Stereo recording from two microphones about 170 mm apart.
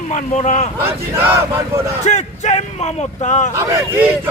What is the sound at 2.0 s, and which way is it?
Speech, 40° left (ahead or behind).